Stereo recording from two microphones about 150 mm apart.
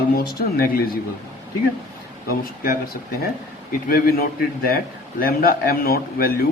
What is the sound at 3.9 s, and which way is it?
A man's voice, 75° left (ahead or behind).